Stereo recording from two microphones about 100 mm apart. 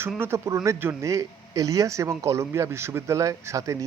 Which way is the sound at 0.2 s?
30° right (ahead or behind).